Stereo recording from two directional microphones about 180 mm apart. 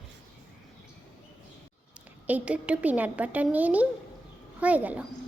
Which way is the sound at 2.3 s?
10° right (ahead or behind).